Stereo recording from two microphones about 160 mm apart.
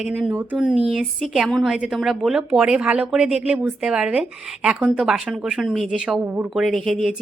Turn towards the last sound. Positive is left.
turn(degrees=0)  # may be behind; listen again after turning